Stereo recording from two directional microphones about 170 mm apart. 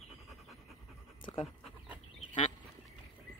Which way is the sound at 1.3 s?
40° left (ahead or behind).